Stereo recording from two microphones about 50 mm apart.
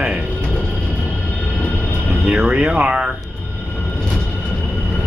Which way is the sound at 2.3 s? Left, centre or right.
Right.